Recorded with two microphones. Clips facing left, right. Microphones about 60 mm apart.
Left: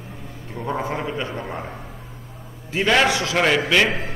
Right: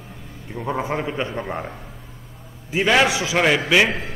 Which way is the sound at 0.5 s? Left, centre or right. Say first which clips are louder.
Right 1 dB; centre.